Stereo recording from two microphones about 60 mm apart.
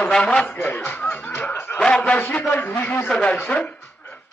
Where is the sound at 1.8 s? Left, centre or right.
Centre.